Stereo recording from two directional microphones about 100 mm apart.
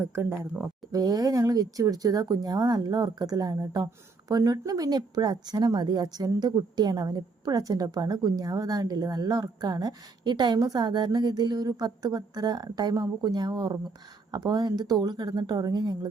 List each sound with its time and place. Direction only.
0.0 s speech: 25° right (ahead or behind)
0.9 s a woman's voice: 40° right (ahead or behind)